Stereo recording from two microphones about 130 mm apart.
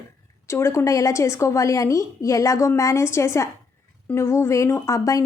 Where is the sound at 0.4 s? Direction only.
20° left (ahead or behind).